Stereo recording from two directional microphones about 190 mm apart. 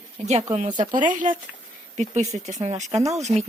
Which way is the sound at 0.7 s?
20° right (ahead or behind).